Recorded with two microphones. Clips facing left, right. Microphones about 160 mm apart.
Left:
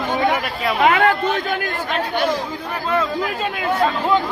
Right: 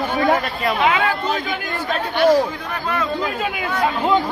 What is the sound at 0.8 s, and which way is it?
Speech, 55° left (ahead or behind).